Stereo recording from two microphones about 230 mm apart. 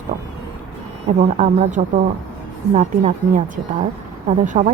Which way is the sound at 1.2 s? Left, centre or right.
Right.